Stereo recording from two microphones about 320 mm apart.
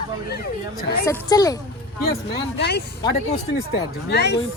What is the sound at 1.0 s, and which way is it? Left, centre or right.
Speech, centre.